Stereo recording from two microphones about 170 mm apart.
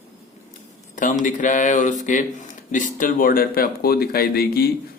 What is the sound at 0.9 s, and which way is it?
A man's voice, 50° left (ahead or behind).